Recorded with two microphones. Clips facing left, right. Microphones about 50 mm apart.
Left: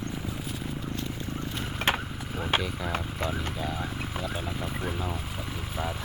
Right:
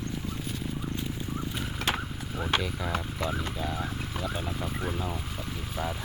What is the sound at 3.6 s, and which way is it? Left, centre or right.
Speech, centre.